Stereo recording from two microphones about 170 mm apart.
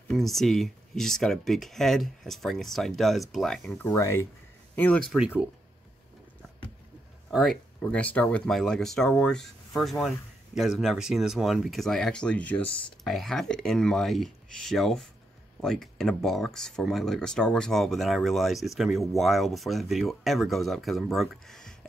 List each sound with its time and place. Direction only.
0.1 s speech: centre (ahead or behind)
3.8 s speech: 15° left (ahead or behind)
7.2 s speech: centre (ahead or behind)